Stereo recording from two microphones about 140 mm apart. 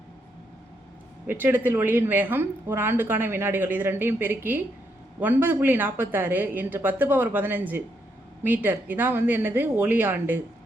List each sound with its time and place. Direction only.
1.3 s a woman's voice: 15° right (ahead or behind)